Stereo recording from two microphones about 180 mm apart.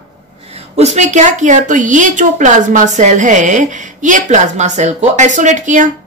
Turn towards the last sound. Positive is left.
turn(degrees=-45)  # may be behind; listen again after turning